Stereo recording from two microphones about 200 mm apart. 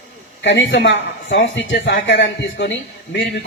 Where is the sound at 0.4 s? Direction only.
65° left (ahead or behind).